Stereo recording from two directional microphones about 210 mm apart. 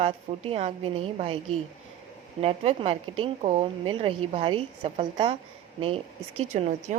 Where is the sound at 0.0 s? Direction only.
30° right (ahead or behind).